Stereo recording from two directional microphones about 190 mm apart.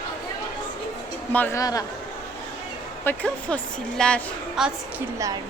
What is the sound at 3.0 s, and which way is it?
A woman's voice, 5° left (ahead or behind).